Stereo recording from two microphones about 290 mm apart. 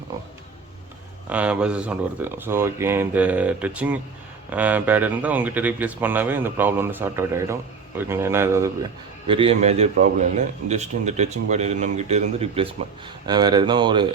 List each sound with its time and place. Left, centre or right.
1.3 s speech: centre